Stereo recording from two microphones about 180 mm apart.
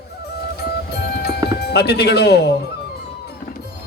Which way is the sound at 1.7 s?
65° left (ahead or behind).